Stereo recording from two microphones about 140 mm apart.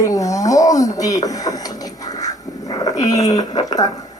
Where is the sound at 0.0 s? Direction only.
25° left (ahead or behind).